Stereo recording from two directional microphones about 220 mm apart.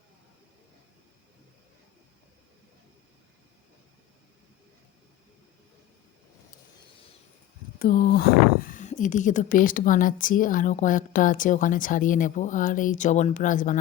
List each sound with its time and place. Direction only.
7.8 s speech: 40° left (ahead or behind)